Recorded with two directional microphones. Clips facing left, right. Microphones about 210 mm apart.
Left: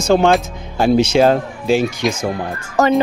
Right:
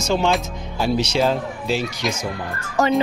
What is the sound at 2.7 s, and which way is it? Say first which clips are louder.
Speech: left 4 dB; 50° left (ahead or behind).